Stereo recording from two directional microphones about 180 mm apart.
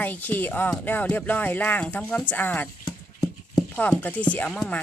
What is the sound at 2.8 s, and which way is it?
Horse, 20° left (ahead or behind).